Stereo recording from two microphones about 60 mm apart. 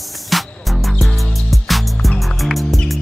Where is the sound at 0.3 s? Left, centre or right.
Centre.